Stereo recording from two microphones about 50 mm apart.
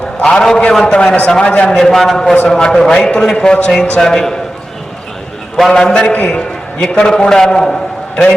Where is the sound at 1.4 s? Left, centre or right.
Left.